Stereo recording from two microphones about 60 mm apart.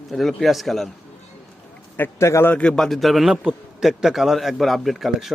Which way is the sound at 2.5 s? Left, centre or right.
Centre.